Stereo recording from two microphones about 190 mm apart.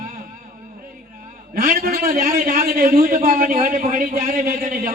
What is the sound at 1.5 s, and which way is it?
A man's voice, 50° right (ahead or behind).